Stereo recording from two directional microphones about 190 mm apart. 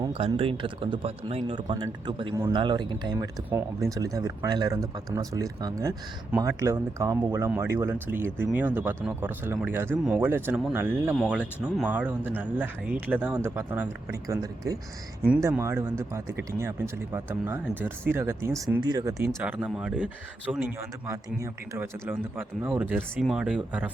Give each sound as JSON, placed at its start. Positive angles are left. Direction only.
{"t": 0.1, "sound": "speech", "side_deg": -30}